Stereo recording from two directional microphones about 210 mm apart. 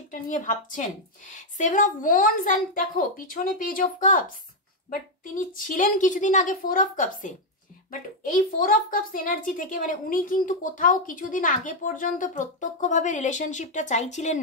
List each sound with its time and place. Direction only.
0.1 s a woman's voice: 40° left (ahead or behind)